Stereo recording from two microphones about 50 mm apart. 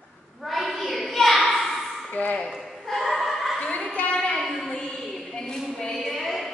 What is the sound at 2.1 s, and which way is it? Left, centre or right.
Ping, left.